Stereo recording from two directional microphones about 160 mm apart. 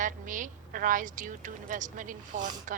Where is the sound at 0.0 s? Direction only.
55° right (ahead or behind).